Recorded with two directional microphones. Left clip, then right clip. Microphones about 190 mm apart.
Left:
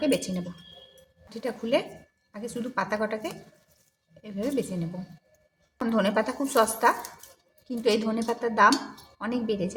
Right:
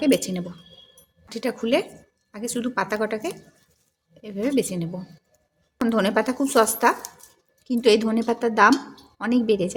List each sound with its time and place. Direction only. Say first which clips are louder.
0.0 s a woman's voice: right 5 dB; 40° right (ahead or behind)
5.9 s a woman's voice: right 3 dB; 35° right (ahead or behind)